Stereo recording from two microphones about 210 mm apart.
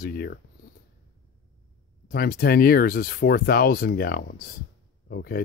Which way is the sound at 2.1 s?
45° left (ahead or behind).